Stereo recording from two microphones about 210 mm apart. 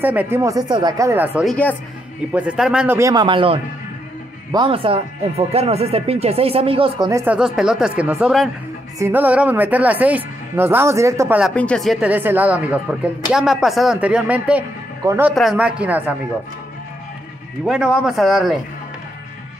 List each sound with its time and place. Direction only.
0.0 s speech: 10° right (ahead or behind)
1.4 s speech: 5° left (ahead or behind); by 7.3 s 15° right (ahead or behind)
7.3 s speech: 5° right (ahead or behind)
11.5 s speech: 5° left (ahead or behind)
17.6 s speech: 5° right (ahead or behind)